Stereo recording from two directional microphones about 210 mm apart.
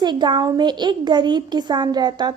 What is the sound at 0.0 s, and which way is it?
A woman's voice, 20° right (ahead or behind).